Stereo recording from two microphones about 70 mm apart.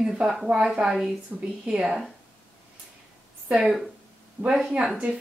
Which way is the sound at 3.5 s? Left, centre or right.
Centre.